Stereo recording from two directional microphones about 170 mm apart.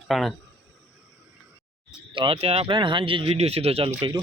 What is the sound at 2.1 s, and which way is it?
Speech, 30° right (ahead or behind).